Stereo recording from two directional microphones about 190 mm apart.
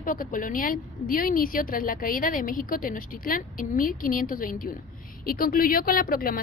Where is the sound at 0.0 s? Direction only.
45° left (ahead or behind).